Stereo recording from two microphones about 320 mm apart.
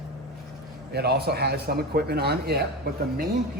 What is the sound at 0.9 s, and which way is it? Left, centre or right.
Speech, right.